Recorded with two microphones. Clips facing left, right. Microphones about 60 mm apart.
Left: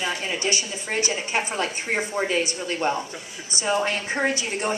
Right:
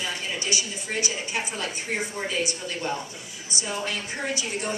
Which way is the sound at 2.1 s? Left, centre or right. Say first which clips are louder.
Left 5 dB; left.